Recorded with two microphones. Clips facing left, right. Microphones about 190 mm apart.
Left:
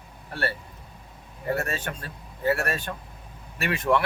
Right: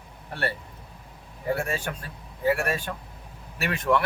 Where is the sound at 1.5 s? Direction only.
10° right (ahead or behind).